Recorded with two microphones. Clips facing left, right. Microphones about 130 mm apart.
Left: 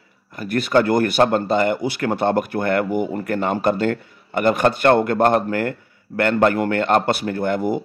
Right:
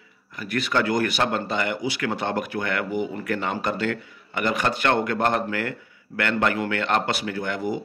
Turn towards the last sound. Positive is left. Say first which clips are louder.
# left 6 dB
turn(degrees=50)  # may be behind; listen again after turning